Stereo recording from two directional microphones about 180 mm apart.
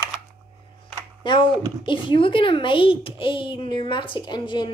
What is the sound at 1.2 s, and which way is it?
A child's voice, 25° left (ahead or behind).